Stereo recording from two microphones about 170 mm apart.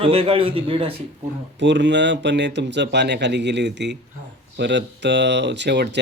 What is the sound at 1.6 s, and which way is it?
Speech, 90° right.